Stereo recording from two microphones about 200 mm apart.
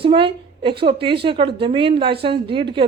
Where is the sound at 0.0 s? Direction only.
25° right (ahead or behind).